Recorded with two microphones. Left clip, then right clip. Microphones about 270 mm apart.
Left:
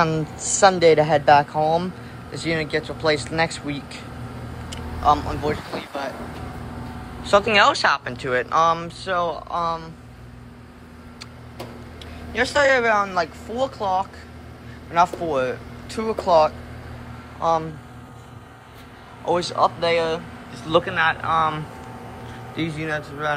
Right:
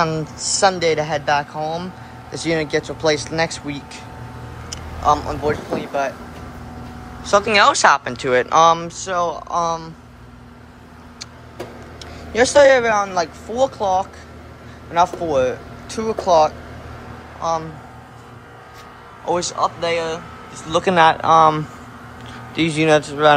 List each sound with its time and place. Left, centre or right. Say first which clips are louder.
0.0 s speech: right 1 dB; centre
2.4 s speech: right 4 dB; centre
5.0 s speech: right 2 dB; centre
7.2 s speech: right 2 dB; centre
12.3 s speech: right 7 dB; centre
19.2 s speech: even; centre
20.8 s speech: right 8 dB; centre